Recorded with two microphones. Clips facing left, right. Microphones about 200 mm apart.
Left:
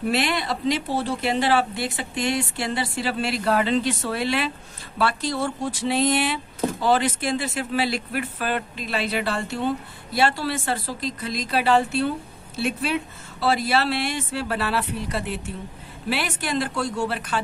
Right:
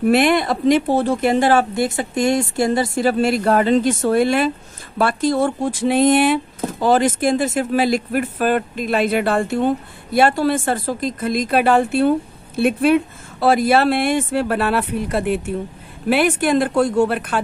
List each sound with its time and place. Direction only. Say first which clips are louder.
0.0 s speech: right 9 dB; 50° right (ahead or behind)